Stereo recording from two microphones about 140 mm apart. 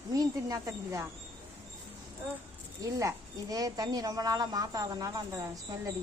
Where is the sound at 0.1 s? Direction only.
25° right (ahead or behind).